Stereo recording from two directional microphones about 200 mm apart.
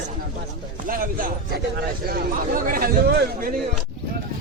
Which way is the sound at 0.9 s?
45° right (ahead or behind).